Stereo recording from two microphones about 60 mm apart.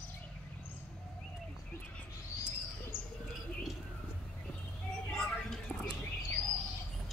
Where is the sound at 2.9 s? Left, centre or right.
Left.